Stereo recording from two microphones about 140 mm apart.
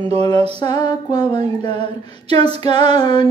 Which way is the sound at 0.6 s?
30° left (ahead or behind).